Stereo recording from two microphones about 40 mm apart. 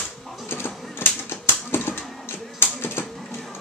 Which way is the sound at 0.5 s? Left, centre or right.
Left.